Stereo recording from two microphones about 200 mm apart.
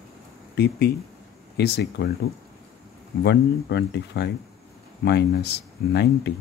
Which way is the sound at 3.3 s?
55° left (ahead or behind).